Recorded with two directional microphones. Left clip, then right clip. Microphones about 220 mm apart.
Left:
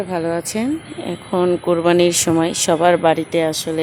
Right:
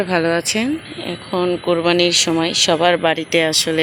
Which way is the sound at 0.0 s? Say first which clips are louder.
Right 4 dB; centre (ahead or behind).